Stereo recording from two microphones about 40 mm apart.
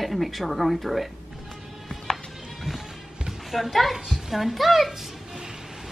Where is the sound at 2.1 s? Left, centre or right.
Centre.